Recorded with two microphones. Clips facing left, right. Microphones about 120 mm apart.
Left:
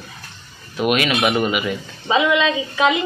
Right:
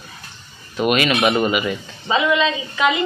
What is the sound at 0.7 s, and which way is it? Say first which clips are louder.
Speech: right 1 dB; centre (ahead or behind).